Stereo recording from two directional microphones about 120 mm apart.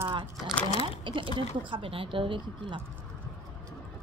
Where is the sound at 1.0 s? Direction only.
45° right (ahead or behind).